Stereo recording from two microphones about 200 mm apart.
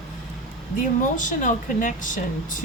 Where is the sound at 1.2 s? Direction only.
40° left (ahead or behind).